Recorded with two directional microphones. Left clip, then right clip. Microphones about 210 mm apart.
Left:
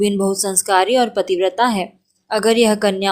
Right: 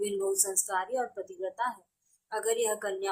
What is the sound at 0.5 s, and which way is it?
A woman's voice, 35° left (ahead or behind).